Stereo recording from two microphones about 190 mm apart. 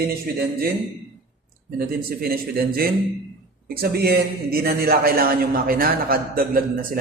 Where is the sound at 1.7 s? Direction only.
50° right (ahead or behind).